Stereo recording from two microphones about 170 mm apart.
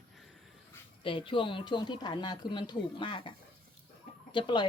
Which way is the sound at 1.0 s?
30° left (ahead or behind).